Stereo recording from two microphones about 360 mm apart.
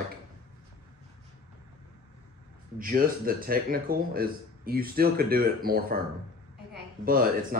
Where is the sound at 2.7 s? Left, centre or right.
Right.